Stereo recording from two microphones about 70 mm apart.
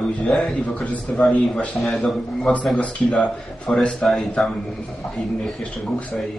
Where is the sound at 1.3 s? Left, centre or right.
Centre.